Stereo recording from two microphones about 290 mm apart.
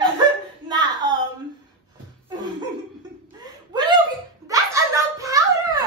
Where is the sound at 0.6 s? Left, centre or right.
Centre.